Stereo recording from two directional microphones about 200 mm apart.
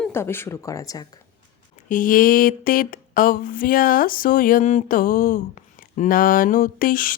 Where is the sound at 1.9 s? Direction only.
45° left (ahead or behind).